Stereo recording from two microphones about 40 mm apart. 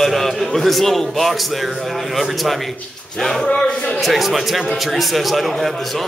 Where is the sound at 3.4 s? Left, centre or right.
Centre.